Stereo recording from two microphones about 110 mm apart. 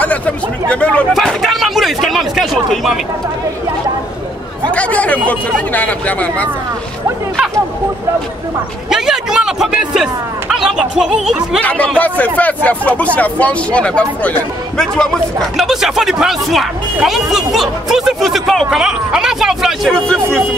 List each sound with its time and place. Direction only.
0.7 s speech: 10° left (ahead or behind)
1.1 s speech: centre (ahead or behind)
4.6 s speech: 15° left (ahead or behind)
8.9 s a sound: 5° right (ahead or behind)
10.5 s speech: 5° right (ahead or behind)
11.6 s speech: 15° left (ahead or behind)
15.5 s speech: centre (ahead or behind)
20.1 s speech: 10° left (ahead or behind)